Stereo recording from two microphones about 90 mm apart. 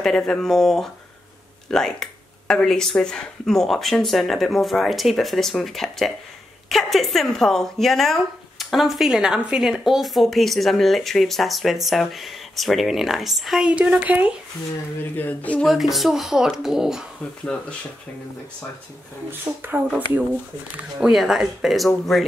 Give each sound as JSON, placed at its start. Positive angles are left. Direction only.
{"t": 0.0, "sound": "speech", "side_deg": 5}
{"t": 15.0, "sound": "speech", "side_deg": 20}
{"t": 15.6, "sound": "speech", "side_deg": 0}
{"t": 19.5, "sound": "speech", "side_deg": -20}
{"t": 21.0, "sound": "speech", "side_deg": -5}